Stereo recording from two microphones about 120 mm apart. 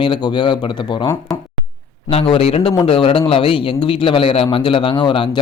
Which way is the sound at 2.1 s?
55° left (ahead or behind).